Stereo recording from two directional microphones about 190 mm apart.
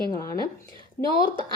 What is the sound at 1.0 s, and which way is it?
Speech, 55° left (ahead or behind).